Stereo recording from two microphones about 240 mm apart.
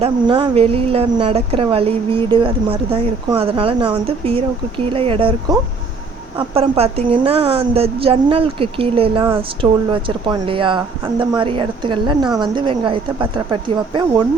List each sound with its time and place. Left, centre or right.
0.0 s a woman's voice: right